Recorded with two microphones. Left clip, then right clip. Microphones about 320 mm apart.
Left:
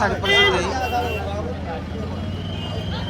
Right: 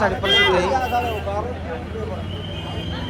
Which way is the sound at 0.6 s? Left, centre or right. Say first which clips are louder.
Right 3 dB; centre.